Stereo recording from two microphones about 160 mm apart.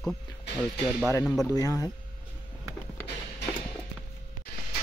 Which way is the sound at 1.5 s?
20° left (ahead or behind).